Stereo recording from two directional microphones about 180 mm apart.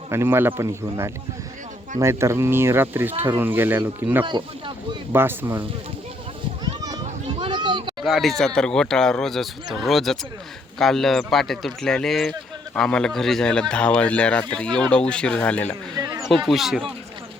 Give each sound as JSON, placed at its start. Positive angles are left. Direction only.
{"t": 0.1, "sound": "speech", "side_deg": -15}
{"t": 4.3, "sound": "speech", "side_deg": -25}
{"t": 5.1, "sound": "speech", "side_deg": -10}
{"t": 6.8, "sound": "a sound", "side_deg": -25}
{"t": 8.0, "sound": "speech", "side_deg": 0}